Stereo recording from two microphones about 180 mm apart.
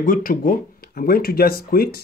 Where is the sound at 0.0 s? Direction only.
50° left (ahead or behind).